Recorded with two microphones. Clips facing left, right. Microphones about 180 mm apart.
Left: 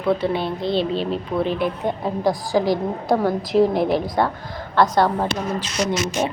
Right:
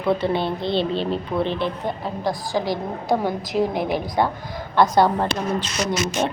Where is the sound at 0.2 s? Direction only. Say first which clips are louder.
Even; 5° left (ahead or behind).